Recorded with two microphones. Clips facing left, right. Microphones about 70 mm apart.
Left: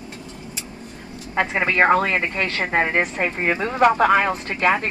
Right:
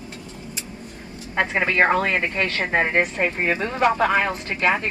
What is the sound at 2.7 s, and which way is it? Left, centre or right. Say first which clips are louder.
Speech: even; left.